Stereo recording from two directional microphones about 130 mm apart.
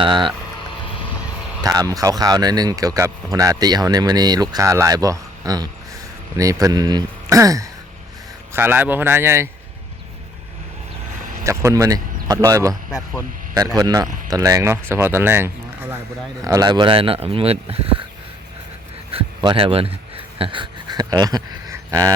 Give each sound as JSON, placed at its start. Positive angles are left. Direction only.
{"t": 0.0, "sound": "speech", "side_deg": -40}
{"t": 1.6, "sound": "speech", "side_deg": -25}
{"t": 11.2, "sound": "a sound", "side_deg": -90}
{"t": 11.4, "sound": "speech", "side_deg": -25}
{"t": 13.7, "sound": "speech", "side_deg": -30}
{"t": 16.4, "sound": "speech", "side_deg": -30}
{"t": 19.4, "sound": "speech", "side_deg": -40}